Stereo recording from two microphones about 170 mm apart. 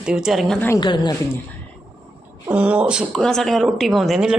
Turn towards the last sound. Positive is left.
turn(degrees=-5)  # may be behind; listen again after turning